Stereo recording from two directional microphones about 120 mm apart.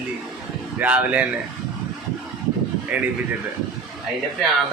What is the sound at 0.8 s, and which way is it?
Speech, 10° right (ahead or behind).